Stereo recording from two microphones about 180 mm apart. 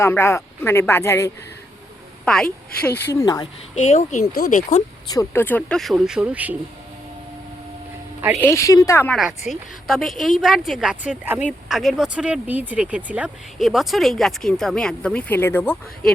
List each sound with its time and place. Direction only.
0.0 s speech: 15° left (ahead or behind)
2.2 s a woman's voice: 5° left (ahead or behind)
3.2 s speech: 20° left (ahead or behind)
3.8 s speech: 45° left (ahead or behind)
5.1 s speech: 10° left (ahead or behind); by 6.6 s 10° right (ahead or behind)
8.4 s speech: 15° left (ahead or behind)
9.5 s speech: centre (ahead or behind)